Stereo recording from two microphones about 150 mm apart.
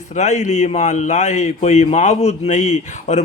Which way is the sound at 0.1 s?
50° left (ahead or behind).